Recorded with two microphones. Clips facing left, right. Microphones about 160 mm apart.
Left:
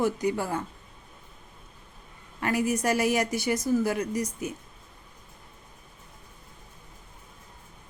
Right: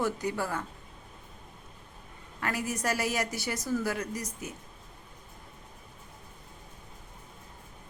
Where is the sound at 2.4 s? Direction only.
15° left (ahead or behind).